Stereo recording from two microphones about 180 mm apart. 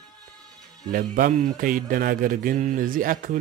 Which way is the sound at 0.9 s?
50° right (ahead or behind).